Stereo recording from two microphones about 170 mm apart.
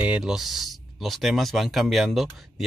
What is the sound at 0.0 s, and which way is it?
Speech, 5° right (ahead or behind).